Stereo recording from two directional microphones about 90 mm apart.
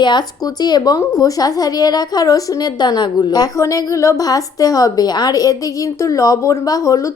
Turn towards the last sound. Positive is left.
turn(degrees=35)  # may be behind; listen again after turning